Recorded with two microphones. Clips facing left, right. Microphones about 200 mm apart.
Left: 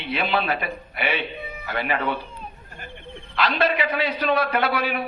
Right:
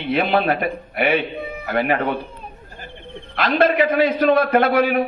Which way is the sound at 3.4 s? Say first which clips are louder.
Right 6 dB; 50° right (ahead or behind).